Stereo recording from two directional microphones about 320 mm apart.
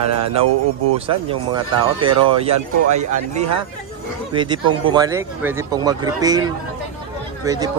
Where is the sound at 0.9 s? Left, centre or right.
Centre.